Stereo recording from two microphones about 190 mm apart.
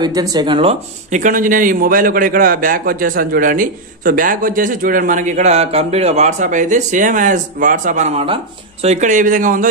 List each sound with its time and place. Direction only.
0.0 s speech: 20° right (ahead or behind)
1.2 s a man's voice: 45° right (ahead or behind)